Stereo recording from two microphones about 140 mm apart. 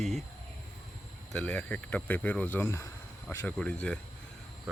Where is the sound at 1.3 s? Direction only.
10° left (ahead or behind).